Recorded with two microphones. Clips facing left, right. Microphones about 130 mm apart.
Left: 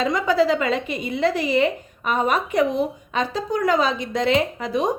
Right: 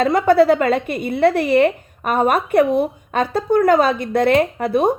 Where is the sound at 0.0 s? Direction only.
55° right (ahead or behind).